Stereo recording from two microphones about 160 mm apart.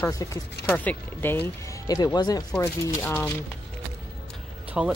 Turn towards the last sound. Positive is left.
turn(degrees=-5)  # may be behind; listen again after turning